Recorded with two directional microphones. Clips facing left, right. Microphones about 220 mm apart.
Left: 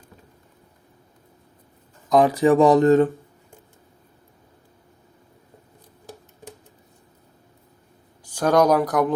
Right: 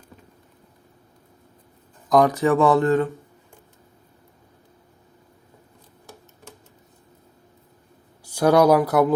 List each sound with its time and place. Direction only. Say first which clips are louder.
2.0 s speech: even; centre (ahead or behind)
2.3 s speech: left 3 dB; 15° left (ahead or behind)
2.7 s speech: left 4 dB; 40° left (ahead or behind)
8.2 s speech: right 2 dB; 10° right (ahead or behind)